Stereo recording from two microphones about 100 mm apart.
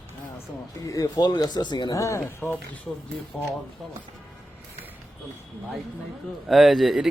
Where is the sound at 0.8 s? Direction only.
35° left (ahead or behind).